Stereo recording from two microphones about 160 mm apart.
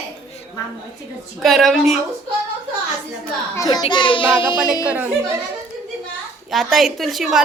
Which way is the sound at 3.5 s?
25° left (ahead or behind).